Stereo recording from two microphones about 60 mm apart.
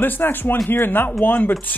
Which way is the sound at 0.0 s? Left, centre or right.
Left.